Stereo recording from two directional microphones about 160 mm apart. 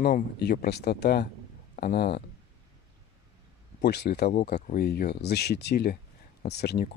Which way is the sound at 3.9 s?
90° left.